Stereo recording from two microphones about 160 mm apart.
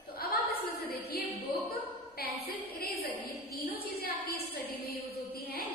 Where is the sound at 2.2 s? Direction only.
70° left (ahead or behind).